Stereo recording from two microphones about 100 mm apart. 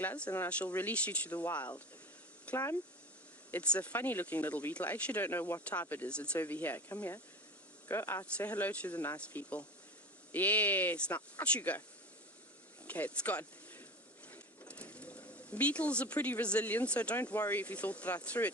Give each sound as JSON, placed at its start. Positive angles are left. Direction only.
{"t": 0.0, "sound": "speech", "side_deg": 15}
{"t": 12.9, "sound": "speech", "side_deg": 15}